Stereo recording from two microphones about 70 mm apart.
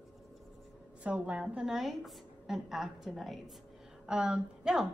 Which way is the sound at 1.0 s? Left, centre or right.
Centre.